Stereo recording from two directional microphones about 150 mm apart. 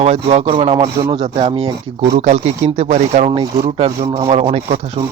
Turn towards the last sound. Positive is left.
turn(degrees=-45)  # may be behind; listen again after turning